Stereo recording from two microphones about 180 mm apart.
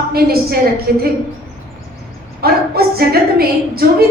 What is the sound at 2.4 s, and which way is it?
A woman's voice, 60° right (ahead or behind).